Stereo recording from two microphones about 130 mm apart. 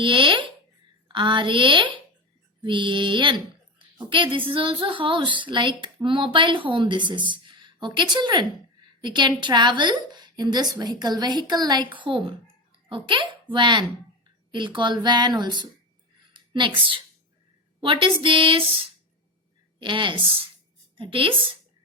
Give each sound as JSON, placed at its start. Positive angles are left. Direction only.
{"t": 0.0, "sound": "a woman's voice", "side_deg": -40}
{"t": 19.8, "sound": "a woman's voice", "side_deg": -40}